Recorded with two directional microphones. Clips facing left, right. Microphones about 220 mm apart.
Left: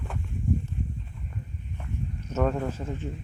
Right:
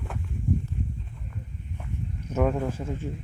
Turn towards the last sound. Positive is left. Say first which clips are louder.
# right 1 dB
turn(degrees=-10)  # may be behind; listen again after turning